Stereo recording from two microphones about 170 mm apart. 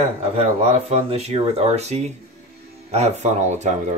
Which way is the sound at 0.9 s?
35° right (ahead or behind).